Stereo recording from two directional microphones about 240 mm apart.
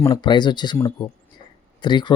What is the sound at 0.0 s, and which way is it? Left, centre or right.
Speech, centre.